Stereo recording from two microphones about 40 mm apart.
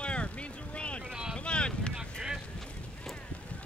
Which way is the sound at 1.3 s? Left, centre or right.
Left.